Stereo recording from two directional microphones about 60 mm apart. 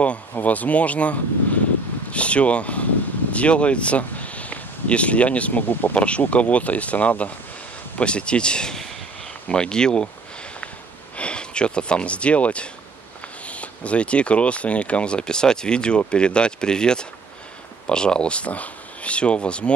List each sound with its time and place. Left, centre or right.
0.4 s speech: left
5.9 s speech: centre
11.1 s speech: centre